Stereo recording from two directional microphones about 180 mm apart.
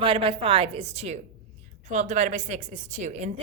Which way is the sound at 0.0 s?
30° right (ahead or behind).